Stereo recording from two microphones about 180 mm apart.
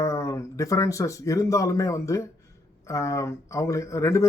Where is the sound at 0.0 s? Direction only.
15° left (ahead or behind).